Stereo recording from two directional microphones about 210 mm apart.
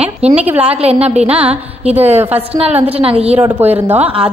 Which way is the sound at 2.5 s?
30° right (ahead or behind).